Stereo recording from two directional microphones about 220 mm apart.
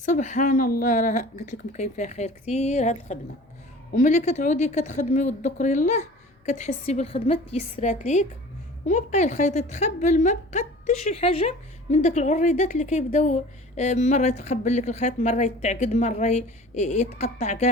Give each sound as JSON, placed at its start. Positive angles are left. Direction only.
{"t": 0.0, "sound": "a woman's voice", "side_deg": 35}